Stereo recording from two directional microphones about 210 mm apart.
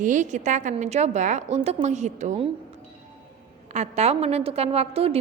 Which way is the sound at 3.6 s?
35° right (ahead or behind).